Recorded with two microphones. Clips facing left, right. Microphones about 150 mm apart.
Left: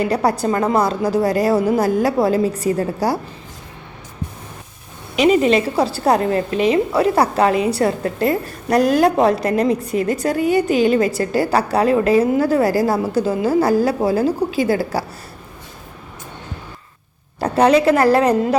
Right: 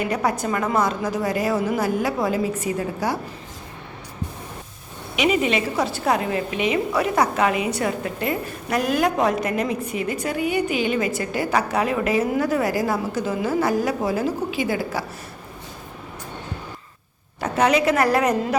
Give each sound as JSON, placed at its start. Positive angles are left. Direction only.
{"t": 0.0, "sound": "a woman's voice", "side_deg": 35}
{"t": 5.1, "sound": "a woman's voice", "side_deg": 35}
{"t": 17.4, "sound": "a woman's voice", "side_deg": 30}